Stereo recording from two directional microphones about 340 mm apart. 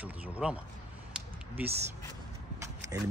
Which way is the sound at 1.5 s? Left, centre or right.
Centre.